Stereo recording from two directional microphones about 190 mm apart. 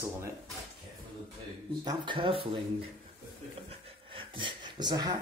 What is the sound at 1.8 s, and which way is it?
Speech, 25° right (ahead or behind).